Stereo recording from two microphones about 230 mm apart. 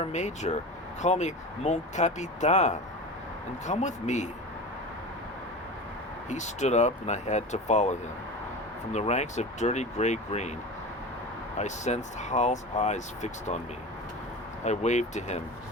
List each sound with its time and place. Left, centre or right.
0.0 s speech: left
6.3 s speech: left
11.5 s speech: left
14.6 s speech: left